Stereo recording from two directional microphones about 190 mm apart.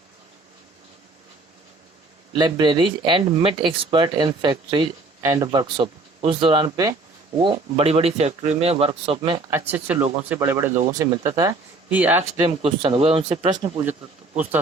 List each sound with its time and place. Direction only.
2.4 s speech: 25° right (ahead or behind)
9.5 s speech: 10° right (ahead or behind)
12.6 s speech: 30° right (ahead or behind)